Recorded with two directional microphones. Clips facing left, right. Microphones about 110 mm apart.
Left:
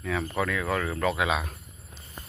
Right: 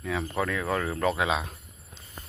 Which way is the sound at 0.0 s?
20° right (ahead or behind).